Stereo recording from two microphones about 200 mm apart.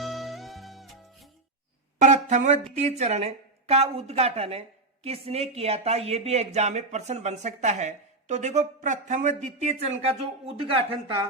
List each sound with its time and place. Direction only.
0.0 s music: centre (ahead or behind)
2.0 s a sound: 35° right (ahead or behind)
2.7 s speech: 35° right (ahead or behind)